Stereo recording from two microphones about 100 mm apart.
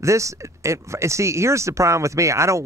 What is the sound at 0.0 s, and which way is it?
Speech, 30° right (ahead or behind).